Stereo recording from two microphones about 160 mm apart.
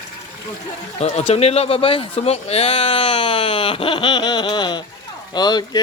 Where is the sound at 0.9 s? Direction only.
40° left (ahead or behind).